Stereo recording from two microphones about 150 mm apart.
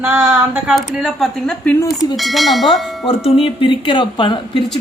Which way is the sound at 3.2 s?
40° left (ahead or behind).